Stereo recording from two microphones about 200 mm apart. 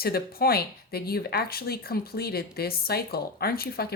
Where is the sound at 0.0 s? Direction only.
50° left (ahead or behind).